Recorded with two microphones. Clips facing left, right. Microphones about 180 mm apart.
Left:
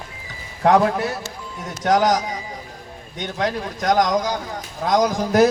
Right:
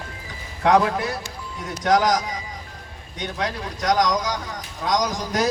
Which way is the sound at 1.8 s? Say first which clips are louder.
Left 2 dB; 35° left (ahead or behind).